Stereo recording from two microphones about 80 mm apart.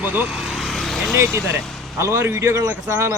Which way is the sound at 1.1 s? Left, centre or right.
Right.